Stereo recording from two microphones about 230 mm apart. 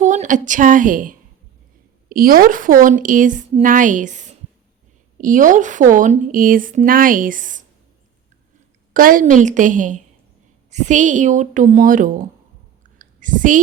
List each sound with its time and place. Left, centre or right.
0.0 s a woman's voice: right
8.9 s a woman's voice: right
13.0 s a sound: right